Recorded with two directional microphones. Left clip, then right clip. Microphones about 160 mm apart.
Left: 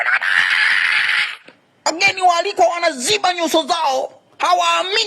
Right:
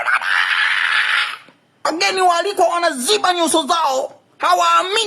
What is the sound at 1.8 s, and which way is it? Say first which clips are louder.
A woman's voice: left 1 dB; 25° left (ahead or behind).